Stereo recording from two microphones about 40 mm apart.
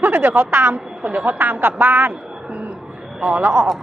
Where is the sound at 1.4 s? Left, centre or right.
Right.